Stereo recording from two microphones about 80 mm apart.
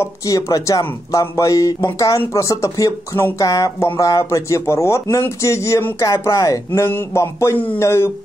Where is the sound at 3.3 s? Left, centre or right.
Left.